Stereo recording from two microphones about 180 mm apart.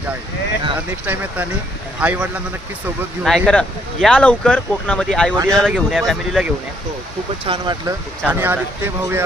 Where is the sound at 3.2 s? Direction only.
5° left (ahead or behind).